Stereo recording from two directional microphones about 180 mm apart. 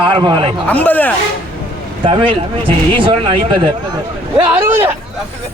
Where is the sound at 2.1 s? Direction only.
30° right (ahead or behind).